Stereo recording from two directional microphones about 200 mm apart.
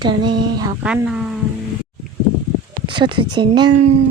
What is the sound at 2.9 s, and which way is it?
Speech, 25° right (ahead or behind).